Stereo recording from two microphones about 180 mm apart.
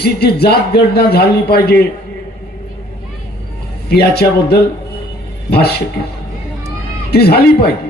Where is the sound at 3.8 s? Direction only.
65° left (ahead or behind).